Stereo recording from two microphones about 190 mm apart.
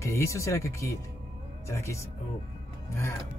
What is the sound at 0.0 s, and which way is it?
Speech, 15° left (ahead or behind).